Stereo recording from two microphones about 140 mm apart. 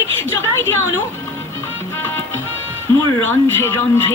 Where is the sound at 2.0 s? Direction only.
15° left (ahead or behind).